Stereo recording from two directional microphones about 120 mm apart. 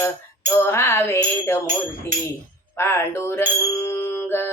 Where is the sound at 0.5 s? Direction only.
20° left (ahead or behind).